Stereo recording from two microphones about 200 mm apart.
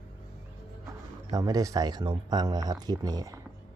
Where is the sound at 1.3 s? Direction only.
20° right (ahead or behind).